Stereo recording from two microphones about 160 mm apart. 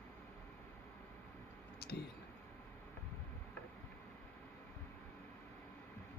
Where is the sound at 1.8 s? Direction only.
90° left.